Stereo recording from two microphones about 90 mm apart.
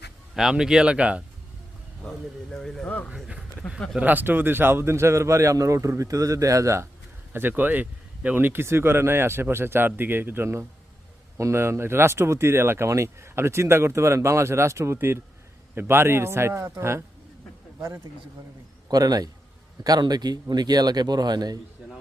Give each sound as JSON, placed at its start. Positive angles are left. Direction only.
{"t": 0.3, "sound": "speech", "side_deg": -5}
{"t": 2.0, "sound": "speech", "side_deg": 10}
{"t": 3.9, "sound": "a man's voice", "side_deg": -20}
{"t": 7.3, "sound": "speech", "side_deg": -20}
{"t": 18.9, "sound": "speech", "side_deg": -45}